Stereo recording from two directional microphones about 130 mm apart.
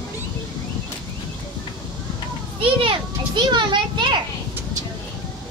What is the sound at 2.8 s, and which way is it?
Children playing, 40° right (ahead or behind).